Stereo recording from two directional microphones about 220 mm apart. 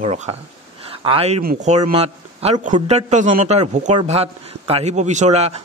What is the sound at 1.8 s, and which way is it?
A man's voice, 25° right (ahead or behind).